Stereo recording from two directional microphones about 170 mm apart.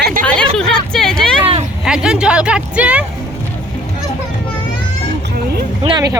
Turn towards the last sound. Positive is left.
turn(degrees=-25)  # may be behind; listen again after turning